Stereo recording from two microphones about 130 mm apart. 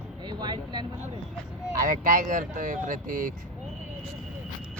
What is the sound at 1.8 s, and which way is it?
Speech, 90° right.